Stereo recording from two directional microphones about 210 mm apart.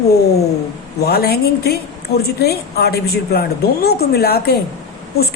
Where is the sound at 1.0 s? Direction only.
50° left (ahead or behind).